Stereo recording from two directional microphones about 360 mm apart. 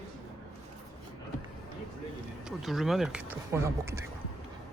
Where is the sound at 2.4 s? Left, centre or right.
Centre.